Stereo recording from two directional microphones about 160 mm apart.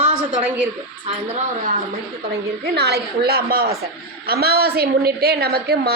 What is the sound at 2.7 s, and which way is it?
A woman's voice, 90° right.